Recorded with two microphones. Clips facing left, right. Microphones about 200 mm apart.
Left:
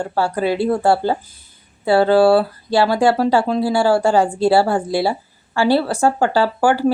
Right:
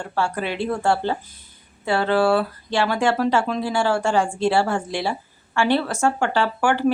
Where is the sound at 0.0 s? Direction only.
35° left (ahead or behind).